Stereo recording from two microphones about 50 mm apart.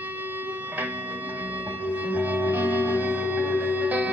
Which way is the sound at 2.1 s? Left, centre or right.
Right.